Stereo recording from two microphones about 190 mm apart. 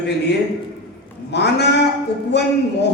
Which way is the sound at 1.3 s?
65° left (ahead or behind).